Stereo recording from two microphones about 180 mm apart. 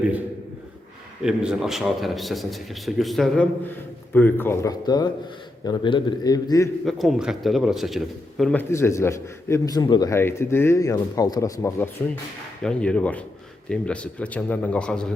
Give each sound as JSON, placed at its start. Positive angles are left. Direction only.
{"t": 1.2, "sound": "a man's voice", "side_deg": -5}
{"t": 6.8, "sound": "a man's voice", "side_deg": 0}
{"t": 8.7, "sound": "a man's voice", "side_deg": 15}